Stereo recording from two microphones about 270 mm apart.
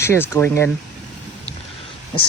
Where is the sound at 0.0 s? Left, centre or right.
Centre.